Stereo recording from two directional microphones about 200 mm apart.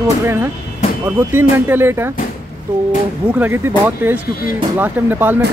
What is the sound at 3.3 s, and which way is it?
Speech, 10° right (ahead or behind).